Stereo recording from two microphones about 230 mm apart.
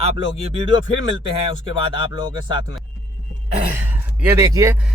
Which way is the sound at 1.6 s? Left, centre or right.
Right.